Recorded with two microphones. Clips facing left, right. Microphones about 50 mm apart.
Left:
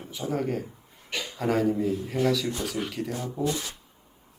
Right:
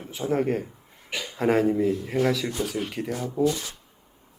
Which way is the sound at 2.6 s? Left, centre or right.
Centre.